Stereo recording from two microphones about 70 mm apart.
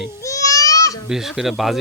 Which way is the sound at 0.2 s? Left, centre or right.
Left.